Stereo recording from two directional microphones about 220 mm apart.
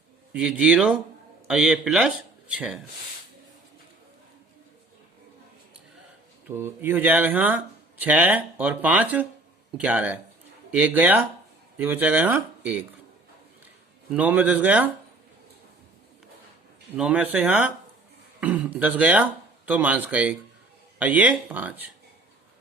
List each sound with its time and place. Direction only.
0.3 s speech: 5° right (ahead or behind)
6.5 s speech: 10° right (ahead or behind)
14.1 s speech: 5° right (ahead or behind)
17.0 s speech: 5° right (ahead or behind)